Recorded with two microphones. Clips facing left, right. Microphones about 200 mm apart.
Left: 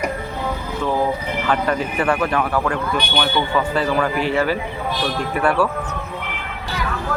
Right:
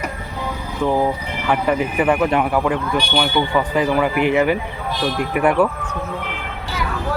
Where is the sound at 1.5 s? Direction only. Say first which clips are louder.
Right 3 dB; 15° right (ahead or behind).